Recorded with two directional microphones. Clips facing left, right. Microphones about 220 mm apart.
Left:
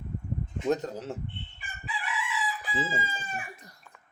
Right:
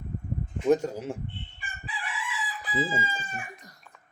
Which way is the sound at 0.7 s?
10° right (ahead or behind).